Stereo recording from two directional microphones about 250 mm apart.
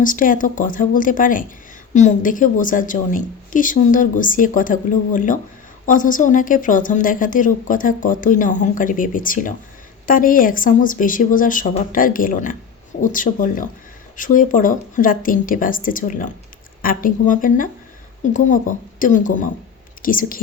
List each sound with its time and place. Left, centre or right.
0.0 s a woman's voice: left